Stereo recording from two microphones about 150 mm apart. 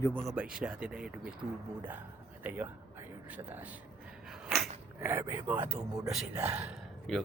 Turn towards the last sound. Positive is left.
turn(degrees=5)  # may be behind; listen again after turning